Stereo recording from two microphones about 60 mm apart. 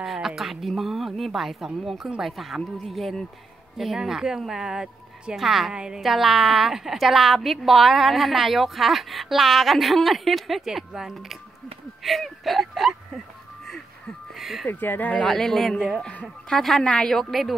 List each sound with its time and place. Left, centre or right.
0.0 s a woman's voice: centre
13.7 s music: centre
14.4 s speech: centre
14.7 s speech: left
15.2 s a woman's voice: centre
17.2 s a woman's voice: centre